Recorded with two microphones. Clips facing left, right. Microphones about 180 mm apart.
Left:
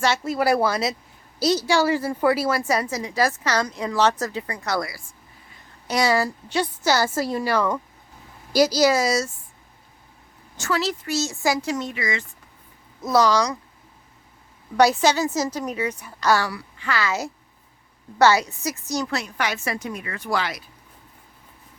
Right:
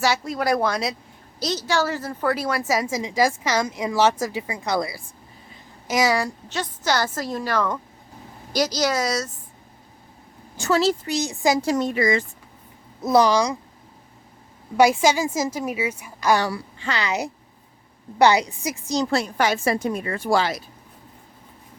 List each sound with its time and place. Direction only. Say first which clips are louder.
0.0 s a woman's voice: left 1 dB; centre (ahead or behind); by 5.0 s 20° right (ahead or behind)
6.0 s a woman's voice: even; centre (ahead or behind)
10.6 s a woman's voice: right 5 dB; 25° right (ahead or behind)
11.6 s speech: right 6 dB; 35° right (ahead or behind)
13.1 s a woman's voice: right 1 dB; 15° right (ahead or behind)
14.8 s a woman's voice: right 1 dB; 10° right (ahead or behind)
16.5 s a woman's voice: right 1 dB; 30° right (ahead or behind)
19.0 s a woman's voice: right 5 dB; 30° right (ahead or behind)